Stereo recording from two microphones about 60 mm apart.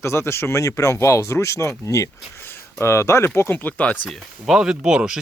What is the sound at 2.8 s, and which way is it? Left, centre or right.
Speech, left.